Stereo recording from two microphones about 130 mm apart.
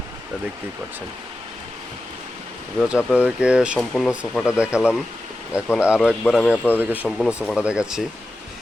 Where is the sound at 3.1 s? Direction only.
10° right (ahead or behind).